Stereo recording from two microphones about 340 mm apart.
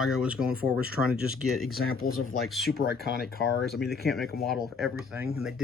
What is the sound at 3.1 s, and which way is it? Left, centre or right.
Speech, left.